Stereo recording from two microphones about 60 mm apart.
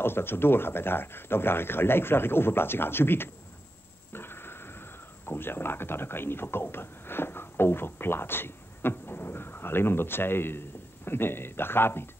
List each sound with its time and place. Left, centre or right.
0.0 s speech: left